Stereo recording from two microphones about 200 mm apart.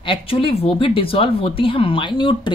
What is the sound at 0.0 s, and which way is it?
Speech, 25° left (ahead or behind).